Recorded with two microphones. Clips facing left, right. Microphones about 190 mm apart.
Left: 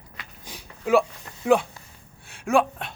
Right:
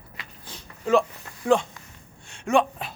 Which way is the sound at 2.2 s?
5° left (ahead or behind).